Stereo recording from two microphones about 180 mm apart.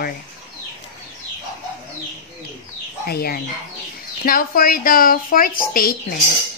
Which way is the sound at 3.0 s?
60° left (ahead or behind).